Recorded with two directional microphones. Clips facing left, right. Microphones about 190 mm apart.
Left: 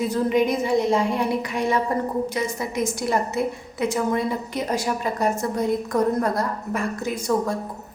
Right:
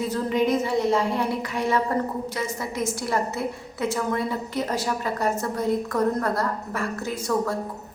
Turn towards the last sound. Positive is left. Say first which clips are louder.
# left 2 dB
turn(degrees=20)  # may be behind; listen again after turning